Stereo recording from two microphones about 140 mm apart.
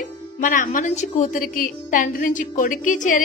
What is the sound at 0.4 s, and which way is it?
A woman's voice, 70° left (ahead or behind).